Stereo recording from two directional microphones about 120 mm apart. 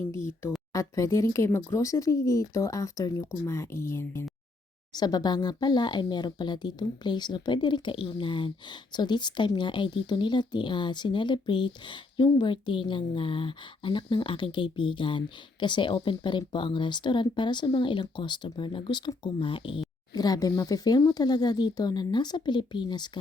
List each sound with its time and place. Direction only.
0.0 s speech: 20° left (ahead or behind)
4.9 s speech: 35° left (ahead or behind)
20.1 s speech: 35° left (ahead or behind)